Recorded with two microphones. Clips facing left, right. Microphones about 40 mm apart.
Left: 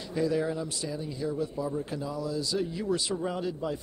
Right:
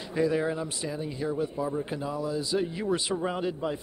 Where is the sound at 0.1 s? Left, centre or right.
Right.